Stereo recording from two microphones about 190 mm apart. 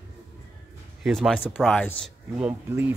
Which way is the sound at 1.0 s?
Centre (ahead or behind).